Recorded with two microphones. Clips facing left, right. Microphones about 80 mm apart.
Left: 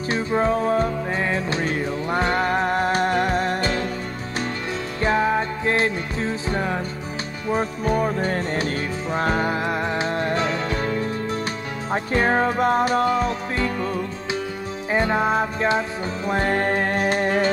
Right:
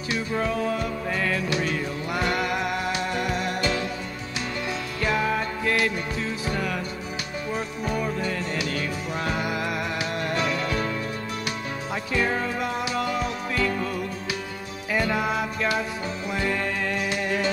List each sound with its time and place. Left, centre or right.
0.1 s music: left
5.0 s music: left
16.3 s music: left